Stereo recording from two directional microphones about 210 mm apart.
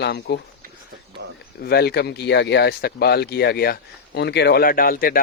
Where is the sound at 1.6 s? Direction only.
50° left (ahead or behind).